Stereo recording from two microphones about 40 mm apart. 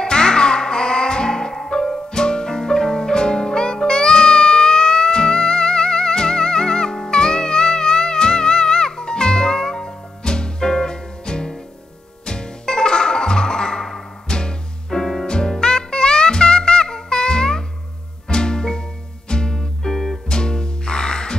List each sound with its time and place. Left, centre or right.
0.0 s music: centre